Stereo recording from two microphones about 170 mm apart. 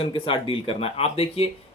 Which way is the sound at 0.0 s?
30° left (ahead or behind).